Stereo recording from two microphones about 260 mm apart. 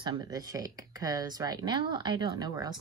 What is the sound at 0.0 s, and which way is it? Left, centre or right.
Speech, centre.